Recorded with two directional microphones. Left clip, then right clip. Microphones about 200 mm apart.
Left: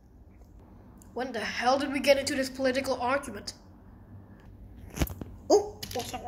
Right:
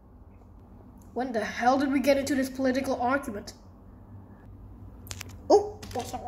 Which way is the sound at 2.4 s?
35° right (ahead or behind).